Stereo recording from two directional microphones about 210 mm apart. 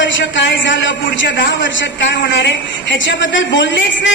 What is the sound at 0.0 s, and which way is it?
A man's voice, 60° left (ahead or behind).